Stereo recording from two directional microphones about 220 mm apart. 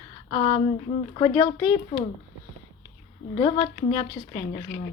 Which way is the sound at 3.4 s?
20° left (ahead or behind).